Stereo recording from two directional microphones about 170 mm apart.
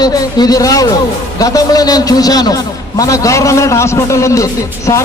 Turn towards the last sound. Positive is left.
turn(degrees=20)  # may be behind; listen again after turning